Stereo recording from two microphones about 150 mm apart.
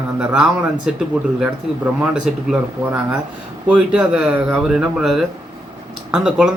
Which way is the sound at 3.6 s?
10° right (ahead or behind).